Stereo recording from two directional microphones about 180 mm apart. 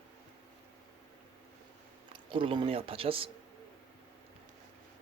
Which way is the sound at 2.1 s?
30° right (ahead or behind).